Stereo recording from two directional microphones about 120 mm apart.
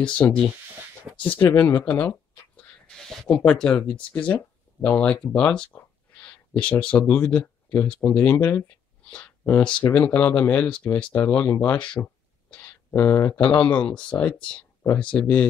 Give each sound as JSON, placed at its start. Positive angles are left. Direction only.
{"t": 0.0, "sound": "speech", "side_deg": 10}
{"t": 1.1, "sound": "a sound", "side_deg": -10}
{"t": 1.4, "sound": "speech", "side_deg": 15}
{"t": 2.9, "sound": "a sound", "side_deg": 0}
{"t": 3.3, "sound": "speech", "side_deg": 5}
{"t": 12.9, "sound": "speech", "side_deg": 20}
{"t": 13.6, "sound": "speech", "side_deg": 10}